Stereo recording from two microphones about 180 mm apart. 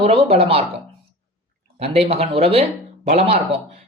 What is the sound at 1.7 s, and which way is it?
Speech, 35° right (ahead or behind).